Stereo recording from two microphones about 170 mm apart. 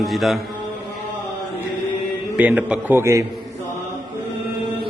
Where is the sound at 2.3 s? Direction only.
10° right (ahead or behind).